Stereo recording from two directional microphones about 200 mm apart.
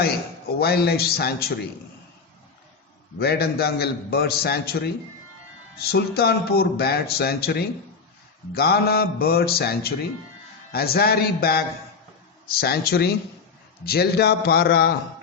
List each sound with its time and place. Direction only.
0.6 s speech: 50° left (ahead or behind)
3.2 s speech: 50° left (ahead or behind)